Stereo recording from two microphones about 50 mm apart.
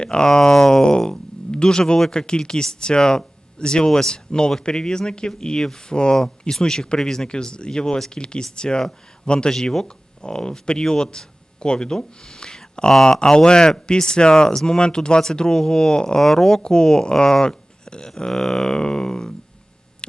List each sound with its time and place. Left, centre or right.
0.0 s speech: centre